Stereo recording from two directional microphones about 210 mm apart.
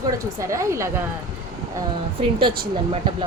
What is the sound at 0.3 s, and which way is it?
Speech, 15° right (ahead or behind).